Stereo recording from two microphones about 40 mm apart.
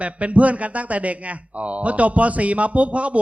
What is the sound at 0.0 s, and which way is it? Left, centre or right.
Speech, right.